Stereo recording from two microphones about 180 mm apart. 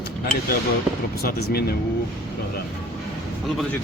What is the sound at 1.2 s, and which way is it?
Speech, 60° left (ahead or behind).